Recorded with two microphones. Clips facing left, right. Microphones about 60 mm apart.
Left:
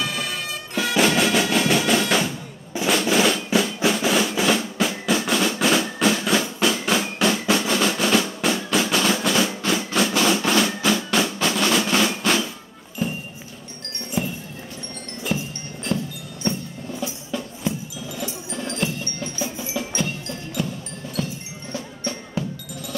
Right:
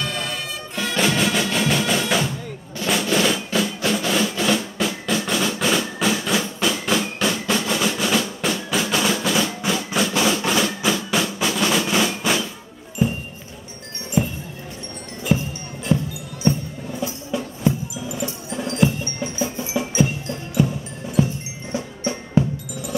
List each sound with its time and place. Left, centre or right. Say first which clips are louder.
0.0 s music: even; centre
2.9 s drum: left 1 dB; centre
9.9 s music: even; centre
11.3 s drum: even; centre
13.0 s a sound: right 5 dB; centre
15.3 s music: right 5 dB; centre
17.0 s music: right 4 dB; centre
18.7 s tubular bells: right 7 dB; centre
19.6 s music: right 7 dB; centre